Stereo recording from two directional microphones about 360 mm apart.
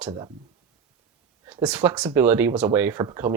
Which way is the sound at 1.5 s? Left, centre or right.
Centre.